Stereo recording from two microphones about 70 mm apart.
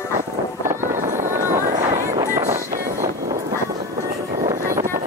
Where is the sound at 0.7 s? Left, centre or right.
Right.